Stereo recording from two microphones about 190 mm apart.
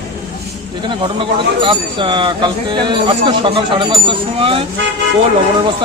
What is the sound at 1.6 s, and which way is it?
Speech, 25° right (ahead or behind).